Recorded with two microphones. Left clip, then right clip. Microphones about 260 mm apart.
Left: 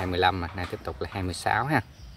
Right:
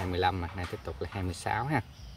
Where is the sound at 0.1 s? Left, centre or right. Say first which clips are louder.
Left 5 dB; centre.